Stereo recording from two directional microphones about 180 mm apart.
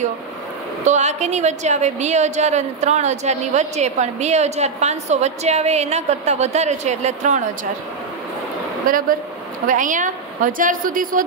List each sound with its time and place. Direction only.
0.8 s a woman's voice: 40° right (ahead or behind)
8.9 s a woman's voice: 50° right (ahead or behind)